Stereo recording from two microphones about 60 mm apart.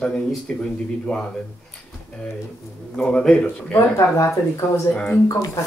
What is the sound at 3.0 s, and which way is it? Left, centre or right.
Speech, centre.